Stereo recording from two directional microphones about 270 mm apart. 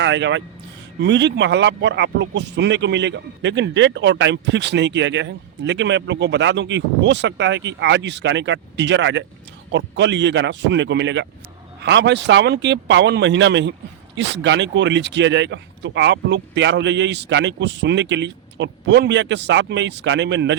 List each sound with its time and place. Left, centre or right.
0.0 s speech: right